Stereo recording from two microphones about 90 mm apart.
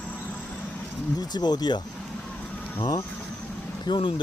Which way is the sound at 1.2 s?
50° left (ahead or behind).